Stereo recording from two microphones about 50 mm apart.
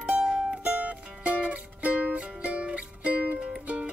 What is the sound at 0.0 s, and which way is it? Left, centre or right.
Music, right.